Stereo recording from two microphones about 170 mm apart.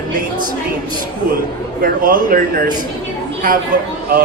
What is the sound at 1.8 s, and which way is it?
Speech, 55° right (ahead or behind).